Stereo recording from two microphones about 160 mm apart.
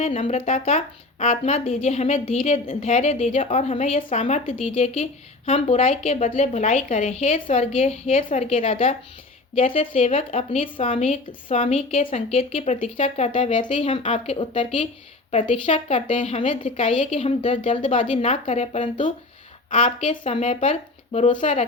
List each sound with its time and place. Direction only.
0.0 s a woman's voice: 45° left (ahead or behind)
15.6 s a woman's voice: 50° left (ahead or behind)
17.7 s speech: 30° left (ahead or behind)
17.9 s a woman's voice: 50° left (ahead or behind)
20.0 s a woman's voice: 40° left (ahead or behind)